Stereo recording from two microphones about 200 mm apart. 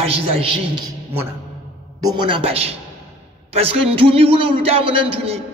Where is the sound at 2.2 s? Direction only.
25° right (ahead or behind).